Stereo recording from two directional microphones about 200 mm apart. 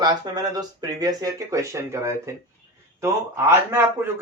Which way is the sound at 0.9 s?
20° right (ahead or behind).